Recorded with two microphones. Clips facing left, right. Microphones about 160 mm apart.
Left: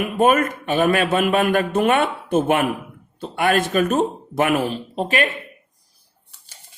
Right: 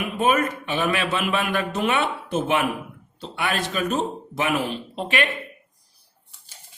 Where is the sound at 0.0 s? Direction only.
50° left (ahead or behind).